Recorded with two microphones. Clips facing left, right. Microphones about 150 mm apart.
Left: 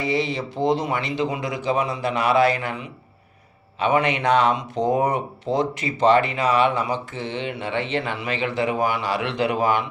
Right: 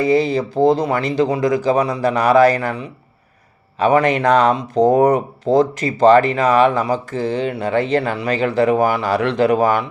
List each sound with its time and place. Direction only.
0.0 s speech: 40° right (ahead or behind)